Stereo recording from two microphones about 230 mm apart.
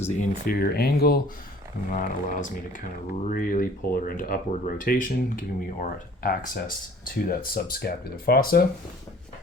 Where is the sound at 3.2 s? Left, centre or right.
Left.